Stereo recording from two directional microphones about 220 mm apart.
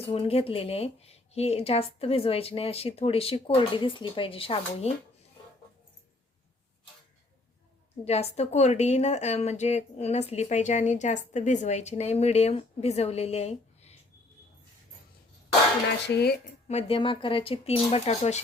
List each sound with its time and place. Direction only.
0.1 s a woman's voice: 25° left (ahead or behind)
8.0 s a woman's voice: 30° left (ahead or behind)
16.0 s speech: 50° left (ahead or behind)
16.6 s a woman's voice: 30° left (ahead or behind)